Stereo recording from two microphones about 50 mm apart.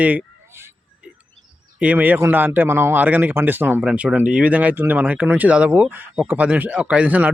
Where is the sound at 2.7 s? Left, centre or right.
Right.